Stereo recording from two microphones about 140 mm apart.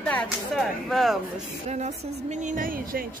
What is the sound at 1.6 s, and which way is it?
Speech, 55° right (ahead or behind).